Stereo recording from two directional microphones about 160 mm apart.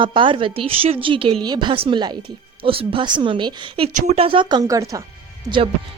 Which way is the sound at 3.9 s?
55° right (ahead or behind).